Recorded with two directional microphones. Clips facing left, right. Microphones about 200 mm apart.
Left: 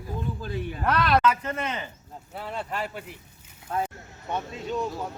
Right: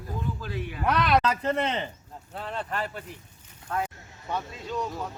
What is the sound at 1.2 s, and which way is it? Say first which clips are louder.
Speech: even; 35° right (ahead or behind).